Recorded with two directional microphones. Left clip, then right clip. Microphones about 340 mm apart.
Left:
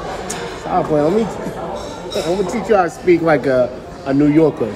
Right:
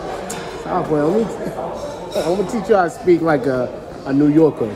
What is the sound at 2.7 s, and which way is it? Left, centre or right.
Speech, centre.